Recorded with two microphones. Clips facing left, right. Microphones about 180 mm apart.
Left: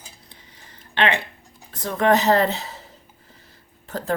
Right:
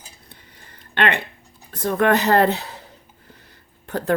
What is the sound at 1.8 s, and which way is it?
Speech, 60° right (ahead or behind).